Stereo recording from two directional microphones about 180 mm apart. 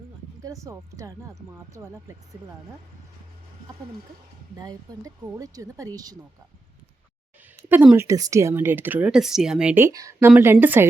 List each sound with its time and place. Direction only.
0.4 s speech: 15° right (ahead or behind)
4.5 s speech: 20° right (ahead or behind)
7.7 s speech: 10° right (ahead or behind)